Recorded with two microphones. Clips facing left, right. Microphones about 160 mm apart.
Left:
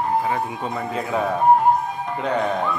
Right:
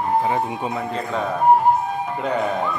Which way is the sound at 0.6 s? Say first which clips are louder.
Right 1 dB; 5° right (ahead or behind).